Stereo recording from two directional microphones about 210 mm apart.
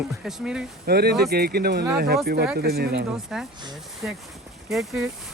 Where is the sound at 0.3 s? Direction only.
5° right (ahead or behind).